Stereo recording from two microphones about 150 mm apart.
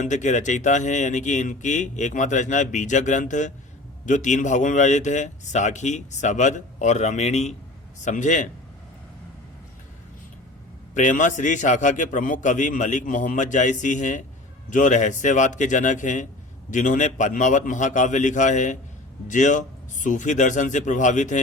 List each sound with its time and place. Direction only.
0.0 s a man's voice: 55° left (ahead or behind)
10.9 s speech: 55° left (ahead or behind)